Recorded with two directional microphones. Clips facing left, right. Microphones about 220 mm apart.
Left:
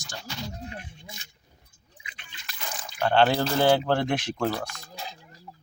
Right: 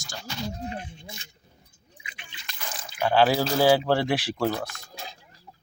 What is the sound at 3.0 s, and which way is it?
Speech, 5° right (ahead or behind).